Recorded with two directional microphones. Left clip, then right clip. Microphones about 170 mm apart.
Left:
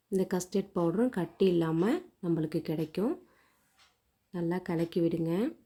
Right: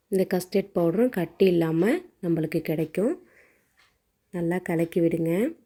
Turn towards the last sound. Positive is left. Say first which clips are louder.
# right 6 dB
turn(degrees=-5)  # may be behind; listen again after turning